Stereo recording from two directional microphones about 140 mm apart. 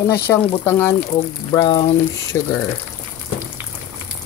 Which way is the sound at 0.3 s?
10° left (ahead or behind).